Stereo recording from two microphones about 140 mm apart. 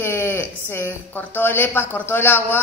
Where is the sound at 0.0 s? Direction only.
15° left (ahead or behind).